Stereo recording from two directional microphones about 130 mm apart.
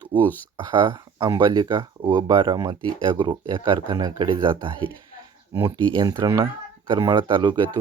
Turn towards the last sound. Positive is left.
turn(degrees=-35)  # may be behind; listen again after turning